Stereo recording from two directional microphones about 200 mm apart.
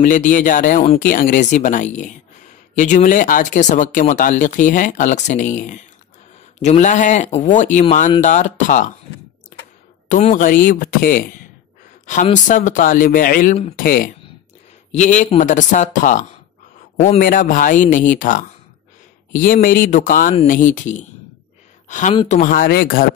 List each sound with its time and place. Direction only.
0.0 s speech: 40° left (ahead or behind)
10.0 s a man's voice: 40° left (ahead or behind)
17.2 s speech: 45° left (ahead or behind)
22.1 s speech: 25° left (ahead or behind)
22.4 s speech: 45° left (ahead or behind)